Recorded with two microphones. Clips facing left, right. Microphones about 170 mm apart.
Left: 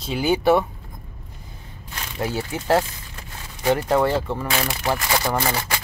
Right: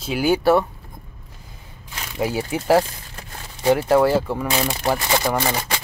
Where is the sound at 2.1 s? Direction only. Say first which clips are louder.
Right 3 dB; 10° right (ahead or behind).